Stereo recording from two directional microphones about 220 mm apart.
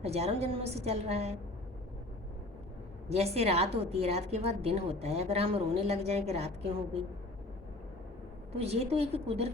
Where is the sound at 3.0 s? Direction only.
30° right (ahead or behind).